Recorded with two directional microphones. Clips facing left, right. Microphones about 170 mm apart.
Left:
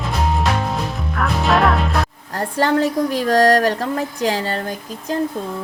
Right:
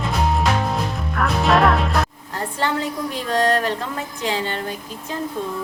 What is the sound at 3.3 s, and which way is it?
Music, 40° left (ahead or behind).